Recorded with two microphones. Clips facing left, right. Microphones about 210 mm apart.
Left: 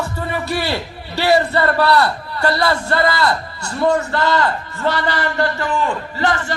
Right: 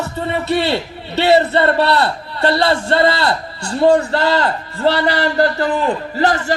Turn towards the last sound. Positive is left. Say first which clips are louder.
# right 3 dB
turn(degrees=-40)  # may be behind; listen again after turning